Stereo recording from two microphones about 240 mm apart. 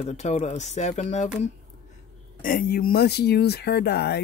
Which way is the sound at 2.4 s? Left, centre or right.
Left.